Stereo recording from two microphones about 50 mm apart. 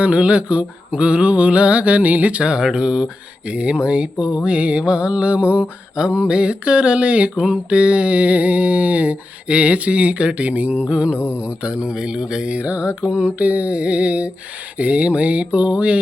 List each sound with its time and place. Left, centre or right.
0.0 s mantra: right